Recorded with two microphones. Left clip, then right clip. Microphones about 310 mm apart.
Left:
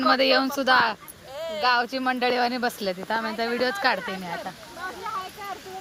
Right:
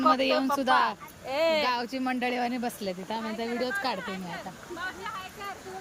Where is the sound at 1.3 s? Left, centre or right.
Right.